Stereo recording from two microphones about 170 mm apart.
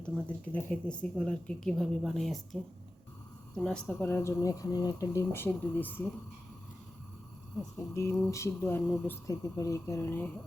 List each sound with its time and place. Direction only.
0.0 s speech: 5° left (ahead or behind)
7.8 s speech: 15° left (ahead or behind)